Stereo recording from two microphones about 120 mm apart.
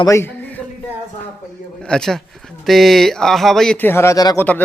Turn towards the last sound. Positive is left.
turn(degrees=15)  # may be behind; listen again after turning